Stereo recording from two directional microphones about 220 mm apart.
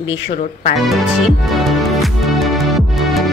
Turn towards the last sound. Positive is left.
turn(degrees=0)  # may be behind; listen again after turning